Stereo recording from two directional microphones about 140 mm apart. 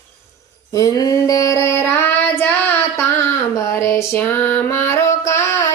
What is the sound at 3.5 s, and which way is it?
Music, 20° left (ahead or behind).